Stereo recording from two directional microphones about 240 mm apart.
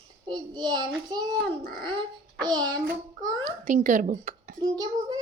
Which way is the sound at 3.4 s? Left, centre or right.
Right.